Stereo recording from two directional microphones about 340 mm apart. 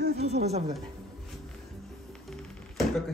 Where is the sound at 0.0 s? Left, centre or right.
Right.